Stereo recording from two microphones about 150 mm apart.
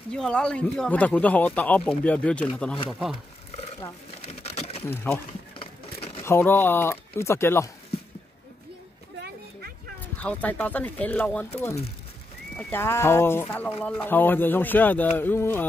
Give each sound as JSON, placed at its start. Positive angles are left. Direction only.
{"t": 0.1, "sound": "speech", "side_deg": 5}
{"t": 4.3, "sound": "pigeon", "side_deg": 45}
{"t": 4.8, "sound": "speech", "side_deg": 15}
{"t": 5.6, "sound": "a sound", "side_deg": 40}
{"t": 6.2, "sound": "speech", "side_deg": 15}
{"t": 10.1, "sound": "speech", "side_deg": 10}